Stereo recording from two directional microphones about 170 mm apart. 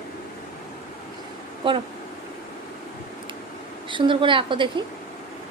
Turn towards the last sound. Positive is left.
turn(degrees=-30)  # may be behind; listen again after turning